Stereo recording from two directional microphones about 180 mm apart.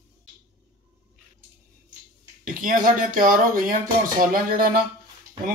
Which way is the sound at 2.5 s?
50° right (ahead or behind).